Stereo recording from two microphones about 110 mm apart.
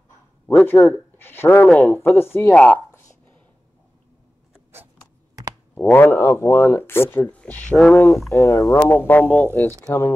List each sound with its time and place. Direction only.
0.5 s speech: 20° left (ahead or behind)
5.8 s speech: 15° left (ahead or behind)
8.3 s speech: 30° left (ahead or behind)
8.8 s speech: 20° left (ahead or behind)